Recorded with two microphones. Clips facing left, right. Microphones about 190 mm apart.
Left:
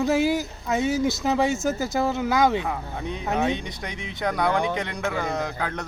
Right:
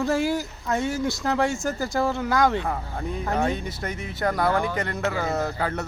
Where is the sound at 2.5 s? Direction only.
5° left (ahead or behind).